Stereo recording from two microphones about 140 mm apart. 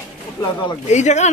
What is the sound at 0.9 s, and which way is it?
Speech, 55° left (ahead or behind).